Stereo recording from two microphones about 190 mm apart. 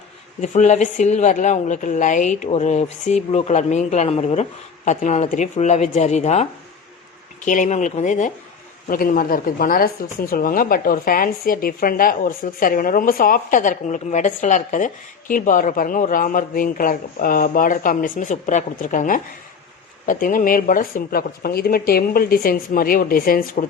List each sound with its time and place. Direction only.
0.4 s a woman's voice: 40° left (ahead or behind)